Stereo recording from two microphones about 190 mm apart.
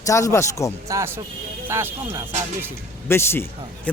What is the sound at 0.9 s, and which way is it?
Speech, 15° right (ahead or behind).